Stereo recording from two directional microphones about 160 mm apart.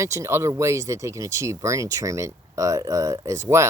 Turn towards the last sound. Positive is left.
turn(degrees=-20)  # may be behind; listen again after turning